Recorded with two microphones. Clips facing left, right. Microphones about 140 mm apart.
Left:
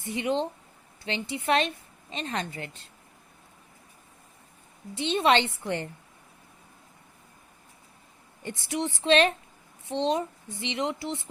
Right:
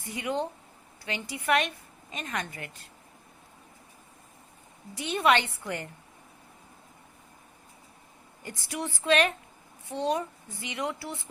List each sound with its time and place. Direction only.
0.0 s a woman's voice: 25° left (ahead or behind)
4.9 s a woman's voice: 25° left (ahead or behind)
8.4 s a woman's voice: 25° left (ahead or behind)